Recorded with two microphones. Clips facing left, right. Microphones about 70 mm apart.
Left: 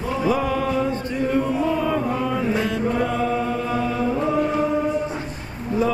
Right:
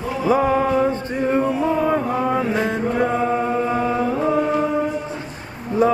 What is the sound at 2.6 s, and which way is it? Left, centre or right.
Chant, right.